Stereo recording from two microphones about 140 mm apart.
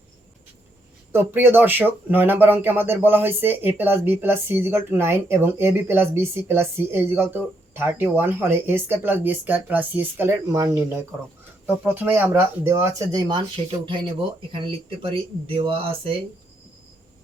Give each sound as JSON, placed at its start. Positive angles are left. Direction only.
{"t": 1.1, "sound": "speech", "side_deg": -15}